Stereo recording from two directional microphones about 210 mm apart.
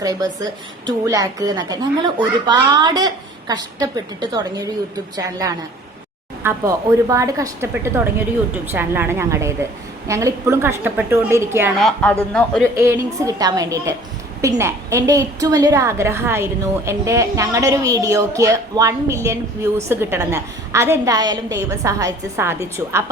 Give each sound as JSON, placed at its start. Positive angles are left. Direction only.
{"t": 0.0, "sound": "a woman's voice", "side_deg": -15}
{"t": 11.8, "sound": "speech", "side_deg": 5}
{"t": 12.7, "sound": "a woman's voice", "side_deg": -10}